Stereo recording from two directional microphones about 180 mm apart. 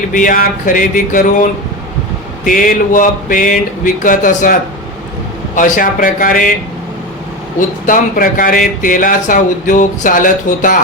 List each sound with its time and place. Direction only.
0.1 s speech: 50° left (ahead or behind)
5.5 s speech: 50° left (ahead or behind)
7.9 s speech: 50° left (ahead or behind)